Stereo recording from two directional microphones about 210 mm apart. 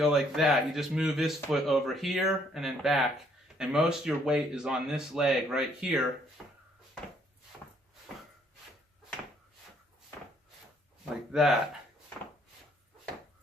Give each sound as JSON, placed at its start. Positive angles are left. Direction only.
{"t": 0.0, "sound": "speech", "side_deg": 0}
{"t": 11.3, "sound": "speech", "side_deg": 0}